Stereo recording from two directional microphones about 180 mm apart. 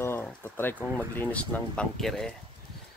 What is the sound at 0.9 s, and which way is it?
Speech, 10° left (ahead or behind).